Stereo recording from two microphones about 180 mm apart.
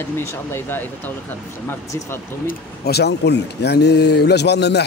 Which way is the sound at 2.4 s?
65° left (ahead or behind).